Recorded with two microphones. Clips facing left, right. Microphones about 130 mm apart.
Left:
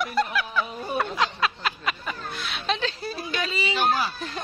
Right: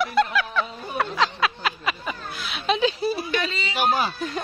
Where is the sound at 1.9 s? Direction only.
5° right (ahead or behind).